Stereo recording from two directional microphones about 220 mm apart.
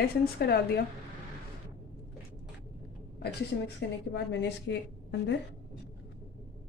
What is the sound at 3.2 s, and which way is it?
Speech, 50° left (ahead or behind).